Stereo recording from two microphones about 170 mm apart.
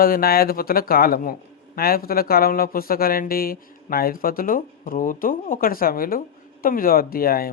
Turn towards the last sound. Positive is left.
turn(degrees=60)  # may be behind; listen again after turning